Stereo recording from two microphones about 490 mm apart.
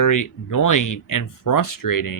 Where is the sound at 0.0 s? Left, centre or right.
Left.